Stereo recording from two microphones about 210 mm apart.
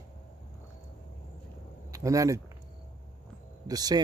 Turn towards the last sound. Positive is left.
turn(degrees=-20)  # may be behind; listen again after turning